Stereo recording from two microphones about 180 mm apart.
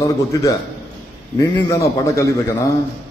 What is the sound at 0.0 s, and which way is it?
A man's voice, 20° left (ahead or behind).